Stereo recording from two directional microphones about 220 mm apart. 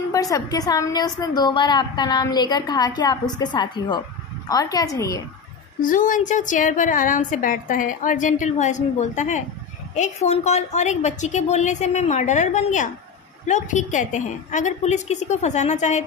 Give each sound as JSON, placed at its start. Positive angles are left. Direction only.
{"t": 0.1, "sound": "a woman's voice", "side_deg": 15}
{"t": 5.8, "sound": "a woman's voice", "side_deg": 35}